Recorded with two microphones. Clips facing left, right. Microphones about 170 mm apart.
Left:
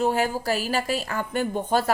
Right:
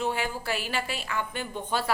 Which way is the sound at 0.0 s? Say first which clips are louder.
Left 7 dB; 40° left (ahead or behind).